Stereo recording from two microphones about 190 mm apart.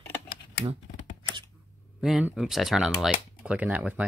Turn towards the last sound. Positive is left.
turn(degrees=-10)  # may be behind; listen again after turning